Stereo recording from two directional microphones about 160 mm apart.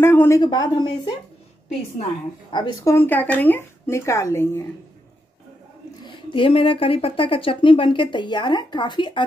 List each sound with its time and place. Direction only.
0.0 s a sound: 15° left (ahead or behind)
0.4 s a woman's voice: 25° left (ahead or behind)
2.5 s a woman's voice: 25° left (ahead or behind)
6.0 s speech: 30° left (ahead or behind)